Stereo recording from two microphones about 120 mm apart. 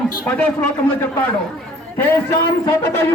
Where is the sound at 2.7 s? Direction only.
20° left (ahead or behind).